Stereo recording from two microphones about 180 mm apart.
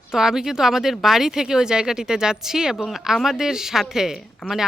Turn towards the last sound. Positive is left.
turn(degrees=-5)  # may be behind; listen again after turning